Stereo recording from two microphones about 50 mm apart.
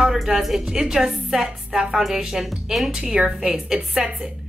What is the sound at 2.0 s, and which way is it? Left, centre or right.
Speech, centre.